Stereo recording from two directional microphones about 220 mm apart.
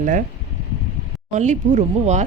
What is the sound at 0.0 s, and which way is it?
Speech, 35° right (ahead or behind).